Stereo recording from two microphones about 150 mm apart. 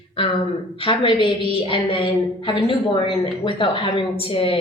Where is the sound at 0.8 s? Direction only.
35° left (ahead or behind).